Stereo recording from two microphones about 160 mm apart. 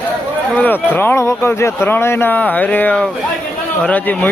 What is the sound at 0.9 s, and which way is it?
Speech, 15° left (ahead or behind).